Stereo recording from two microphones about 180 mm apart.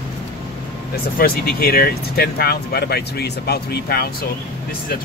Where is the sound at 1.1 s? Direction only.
55° left (ahead or behind).